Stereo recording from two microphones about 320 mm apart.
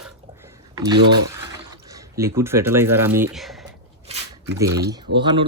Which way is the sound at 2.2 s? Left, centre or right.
Centre.